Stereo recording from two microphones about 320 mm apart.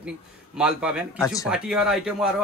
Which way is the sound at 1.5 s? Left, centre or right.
Centre.